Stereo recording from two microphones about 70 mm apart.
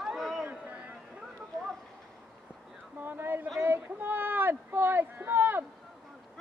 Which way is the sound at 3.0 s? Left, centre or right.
Right.